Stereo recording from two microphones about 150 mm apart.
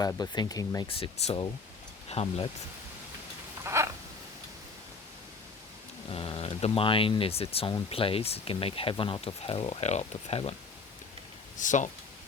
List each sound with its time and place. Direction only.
0.0 s speech: 25° left (ahead or behind)
0.9 s speech: 35° left (ahead or behind)
3.6 s a sound: 20° right (ahead or behind)
6.1 s speech: 40° left (ahead or behind)
11.5 s speech: 55° left (ahead or behind)